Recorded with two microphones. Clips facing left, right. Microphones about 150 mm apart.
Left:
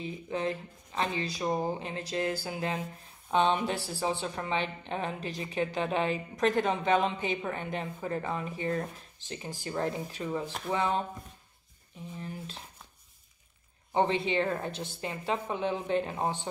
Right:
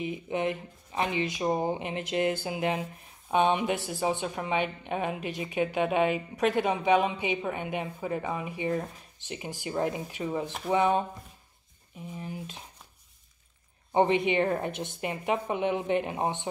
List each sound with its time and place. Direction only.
0.0 s a woman's voice: 15° right (ahead or behind)
12.2 s a woman's voice: 15° right (ahead or behind)
13.9 s a woman's voice: 15° right (ahead or behind)